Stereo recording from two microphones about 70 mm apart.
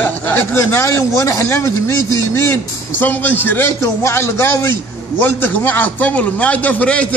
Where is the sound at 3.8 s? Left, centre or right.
Left; by 7.0 s centre.